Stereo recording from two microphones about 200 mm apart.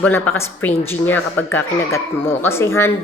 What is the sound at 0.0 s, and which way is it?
Speech, 10° left (ahead or behind).